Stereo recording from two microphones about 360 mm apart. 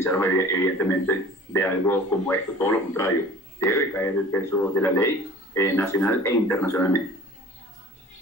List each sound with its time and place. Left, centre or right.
0.0 s a man's voice: centre